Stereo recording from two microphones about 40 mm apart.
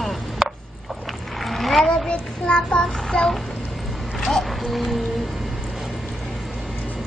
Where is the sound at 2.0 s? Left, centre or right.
Left.